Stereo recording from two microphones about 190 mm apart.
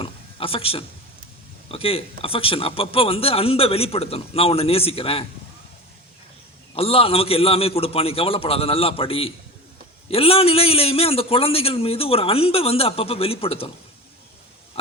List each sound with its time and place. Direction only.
0.0 s a sound: 30° left (ahead or behind)
1.7 s speech: 30° left (ahead or behind)
6.7 s a man's voice: 30° left (ahead or behind)